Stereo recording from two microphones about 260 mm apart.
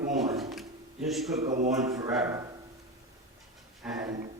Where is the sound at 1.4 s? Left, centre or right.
Right.